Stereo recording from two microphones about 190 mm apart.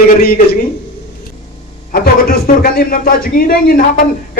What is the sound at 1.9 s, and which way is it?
A man's voice, 50° left (ahead or behind).